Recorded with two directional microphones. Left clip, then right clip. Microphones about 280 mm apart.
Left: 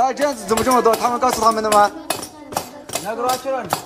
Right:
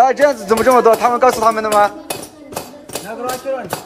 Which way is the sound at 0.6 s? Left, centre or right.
Centre.